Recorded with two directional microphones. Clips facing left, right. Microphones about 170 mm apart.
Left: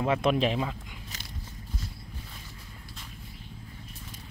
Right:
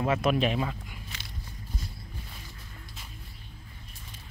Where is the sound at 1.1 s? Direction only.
40° left (ahead or behind).